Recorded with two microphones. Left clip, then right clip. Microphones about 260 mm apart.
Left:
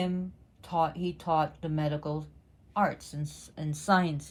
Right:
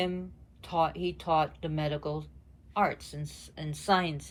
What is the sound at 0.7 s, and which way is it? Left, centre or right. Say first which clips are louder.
Speech: even; left.